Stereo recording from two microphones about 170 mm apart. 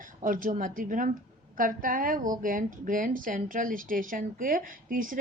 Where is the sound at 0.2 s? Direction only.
50° right (ahead or behind).